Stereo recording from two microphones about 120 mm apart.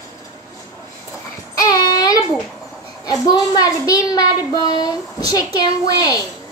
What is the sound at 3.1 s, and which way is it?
Speech, 30° left (ahead or behind).